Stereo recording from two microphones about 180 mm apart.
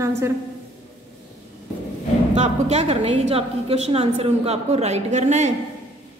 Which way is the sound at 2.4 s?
35° right (ahead or behind).